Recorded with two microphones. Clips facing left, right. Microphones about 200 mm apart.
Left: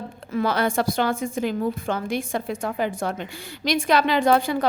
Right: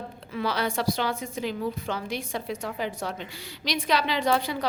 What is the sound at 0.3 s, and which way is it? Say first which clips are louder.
A woman's voice: left 6 dB; 45° left (ahead or behind).